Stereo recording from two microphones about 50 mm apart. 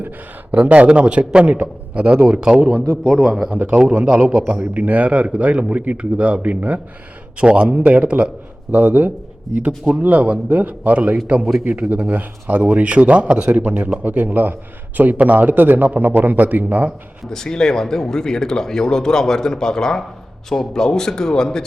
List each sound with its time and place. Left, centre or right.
0.5 s a man's voice: right
3.0 s a man's voice: centre
3.7 s a man's voice: centre; by 16.9 s right
17.2 s speech: centre